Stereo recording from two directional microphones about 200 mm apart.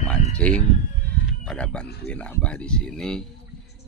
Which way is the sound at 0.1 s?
5° left (ahead or behind).